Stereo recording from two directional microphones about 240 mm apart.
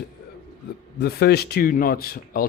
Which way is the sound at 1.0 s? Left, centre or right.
Left.